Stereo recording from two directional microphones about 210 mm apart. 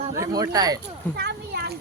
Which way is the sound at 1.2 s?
50° right (ahead or behind).